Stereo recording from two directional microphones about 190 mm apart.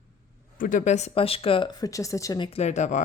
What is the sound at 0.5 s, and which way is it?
A woman's voice, 45° left (ahead or behind).